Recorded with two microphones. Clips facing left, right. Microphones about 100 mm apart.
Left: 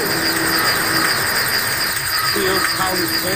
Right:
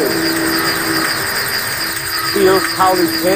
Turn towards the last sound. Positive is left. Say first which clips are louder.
# right 9 dB
turn(degrees=0)  # may be behind; listen again after turning